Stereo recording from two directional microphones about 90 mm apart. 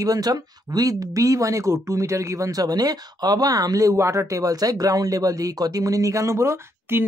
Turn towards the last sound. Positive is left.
turn(degrees=-30)  # may be behind; listen again after turning